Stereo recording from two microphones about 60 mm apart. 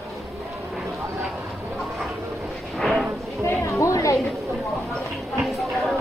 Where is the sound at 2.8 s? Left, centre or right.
Centre.